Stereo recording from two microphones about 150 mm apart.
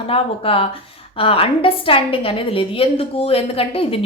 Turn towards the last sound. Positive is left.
turn(degrees=40)  # may be behind; listen again after turning